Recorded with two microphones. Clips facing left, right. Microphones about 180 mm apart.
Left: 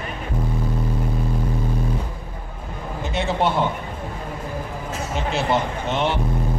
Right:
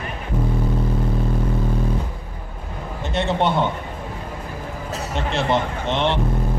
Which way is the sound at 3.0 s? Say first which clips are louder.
Right 1 dB; centre (ahead or behind).